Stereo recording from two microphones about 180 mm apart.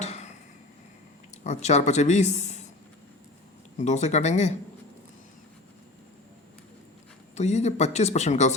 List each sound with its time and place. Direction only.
0.0 s a sound: 40° left (ahead or behind)
1.5 s speech: 40° left (ahead or behind)
3.8 s speech: 40° left (ahead or behind)
7.3 s speech: 40° left (ahead or behind)